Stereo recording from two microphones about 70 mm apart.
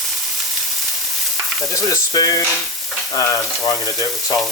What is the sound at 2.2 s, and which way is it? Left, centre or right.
Frying, left.